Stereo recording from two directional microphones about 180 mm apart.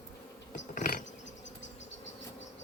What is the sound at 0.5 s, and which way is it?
Insect, 45° left (ahead or behind).